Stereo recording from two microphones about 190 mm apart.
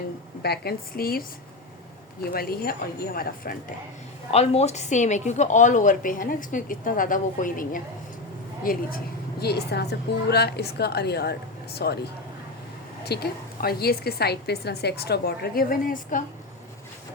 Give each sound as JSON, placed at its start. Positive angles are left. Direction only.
{"t": 0.4, "sound": "a woman's voice", "side_deg": 55}
{"t": 2.3, "sound": "a woman's voice", "side_deg": 55}
{"t": 4.3, "sound": "a woman's voice", "side_deg": 35}
{"t": 13.1, "sound": "a woman's voice", "side_deg": 55}